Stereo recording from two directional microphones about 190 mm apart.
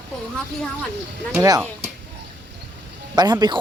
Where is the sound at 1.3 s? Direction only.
20° right (ahead or behind).